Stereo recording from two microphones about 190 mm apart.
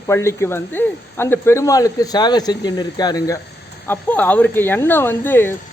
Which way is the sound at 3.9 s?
10° left (ahead or behind).